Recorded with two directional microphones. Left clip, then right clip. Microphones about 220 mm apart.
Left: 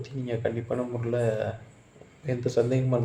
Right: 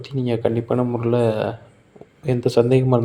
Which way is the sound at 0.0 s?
40° right (ahead or behind).